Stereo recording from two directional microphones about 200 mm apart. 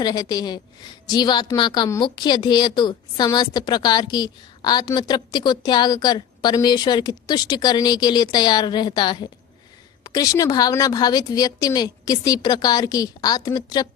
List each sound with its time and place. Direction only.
0.0 s a woman's voice: 20° left (ahead or behind)